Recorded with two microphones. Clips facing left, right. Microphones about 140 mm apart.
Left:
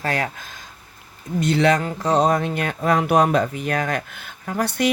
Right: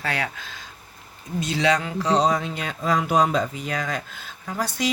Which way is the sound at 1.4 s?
55° left (ahead or behind).